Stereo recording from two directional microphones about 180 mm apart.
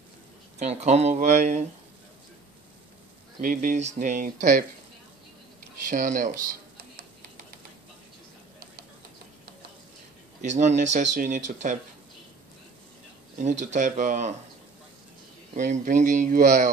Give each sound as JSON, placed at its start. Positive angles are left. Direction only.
{"t": 0.6, "sound": "speech", "side_deg": -40}
{"t": 3.3, "sound": "speech", "side_deg": -45}
{"t": 5.9, "sound": "speech", "side_deg": -45}
{"t": 10.4, "sound": "speech", "side_deg": -40}
{"t": 13.4, "sound": "speech", "side_deg": -40}
{"t": 15.5, "sound": "speech", "side_deg": -40}